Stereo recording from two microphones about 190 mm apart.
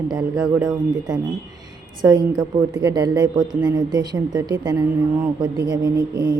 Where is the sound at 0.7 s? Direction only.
20° right (ahead or behind).